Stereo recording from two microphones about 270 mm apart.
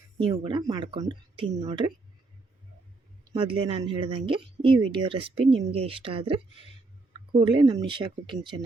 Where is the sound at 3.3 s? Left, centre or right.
Centre.